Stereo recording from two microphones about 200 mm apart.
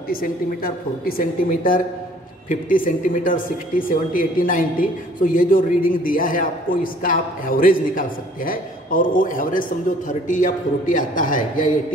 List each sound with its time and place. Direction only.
0.1 s speech: 45° left (ahead or behind)